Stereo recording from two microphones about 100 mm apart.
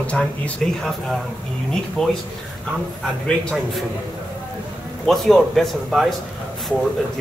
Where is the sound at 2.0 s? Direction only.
5° left (ahead or behind).